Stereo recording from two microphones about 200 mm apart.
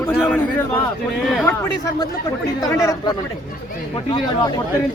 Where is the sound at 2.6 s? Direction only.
15° left (ahead or behind).